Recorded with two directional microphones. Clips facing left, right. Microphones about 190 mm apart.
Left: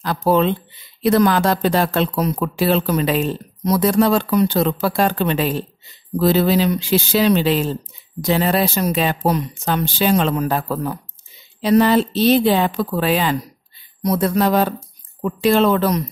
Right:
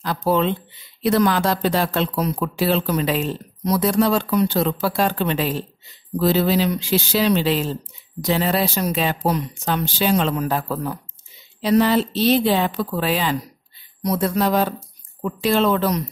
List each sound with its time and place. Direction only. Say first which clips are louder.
0.0 s speech: left 3 dB; 55° left (ahead or behind)
11.6 s speech: left 3 dB; 50° left (ahead or behind)